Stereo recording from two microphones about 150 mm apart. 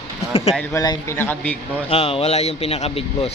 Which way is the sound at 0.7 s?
25° left (ahead or behind).